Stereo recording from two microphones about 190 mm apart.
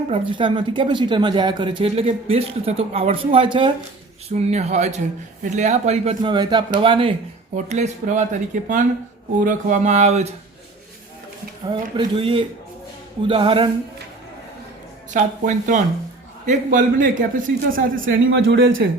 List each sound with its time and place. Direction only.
0.1 s speech: 25° right (ahead or behind)
7.5 s speech: 40° right (ahead or behind)
11.7 s speech: 25° right (ahead or behind)
15.1 s a man's voice: 40° right (ahead or behind)
18.0 s speech: 70° right (ahead or behind)